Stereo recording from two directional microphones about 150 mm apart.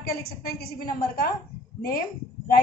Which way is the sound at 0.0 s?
85° left.